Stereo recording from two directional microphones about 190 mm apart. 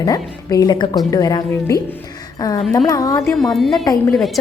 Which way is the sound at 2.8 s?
20° left (ahead or behind).